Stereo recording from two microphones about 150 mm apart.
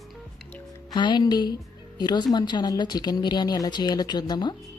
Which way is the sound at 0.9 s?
30° left (ahead or behind).